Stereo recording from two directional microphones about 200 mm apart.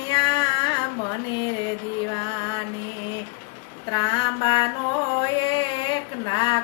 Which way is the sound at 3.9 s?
25° left (ahead or behind).